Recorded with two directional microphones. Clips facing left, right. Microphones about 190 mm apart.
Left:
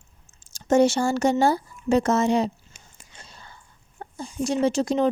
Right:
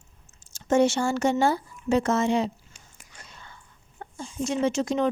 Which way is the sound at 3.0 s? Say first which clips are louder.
Left 1 dB; 25° left (ahead or behind).